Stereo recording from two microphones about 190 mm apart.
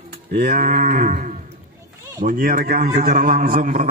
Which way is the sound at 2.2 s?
55° right (ahead or behind).